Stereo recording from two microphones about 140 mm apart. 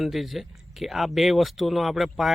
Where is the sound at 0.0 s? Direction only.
Centre (ahead or behind).